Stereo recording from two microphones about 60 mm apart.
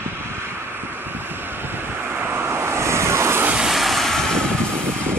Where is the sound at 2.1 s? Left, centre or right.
Right.